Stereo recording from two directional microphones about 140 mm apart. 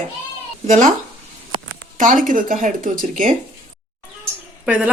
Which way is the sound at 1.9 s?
70° right (ahead or behind).